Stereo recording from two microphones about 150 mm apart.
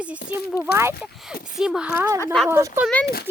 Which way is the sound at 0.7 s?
90° left.